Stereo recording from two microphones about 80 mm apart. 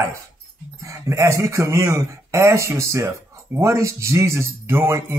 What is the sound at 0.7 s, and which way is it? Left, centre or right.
Speech, right.